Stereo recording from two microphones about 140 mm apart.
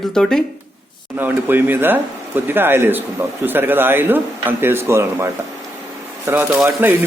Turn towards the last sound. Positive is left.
turn(degrees=-15)  # may be behind; listen again after turning